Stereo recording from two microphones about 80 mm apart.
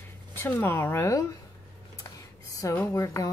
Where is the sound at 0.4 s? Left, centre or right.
Left.